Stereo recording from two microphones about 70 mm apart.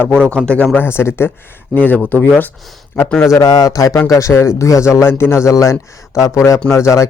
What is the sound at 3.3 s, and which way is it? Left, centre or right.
Speech, left.